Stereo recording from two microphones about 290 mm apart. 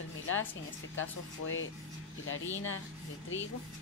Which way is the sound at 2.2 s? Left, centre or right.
Left.